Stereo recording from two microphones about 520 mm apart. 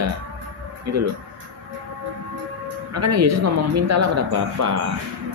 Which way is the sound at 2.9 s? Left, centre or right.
Right.